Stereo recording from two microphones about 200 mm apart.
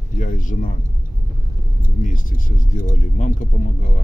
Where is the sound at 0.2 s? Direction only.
40° left (ahead or behind).